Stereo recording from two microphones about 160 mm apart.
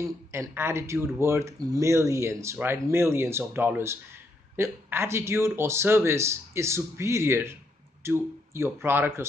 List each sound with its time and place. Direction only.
0.0 s speech: 15° right (ahead or behind)